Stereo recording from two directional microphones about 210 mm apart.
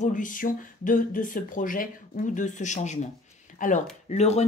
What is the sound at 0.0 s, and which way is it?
Speech, 40° left (ahead or behind).